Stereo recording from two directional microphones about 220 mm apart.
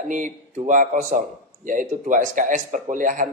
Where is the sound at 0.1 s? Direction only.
35° right (ahead or behind).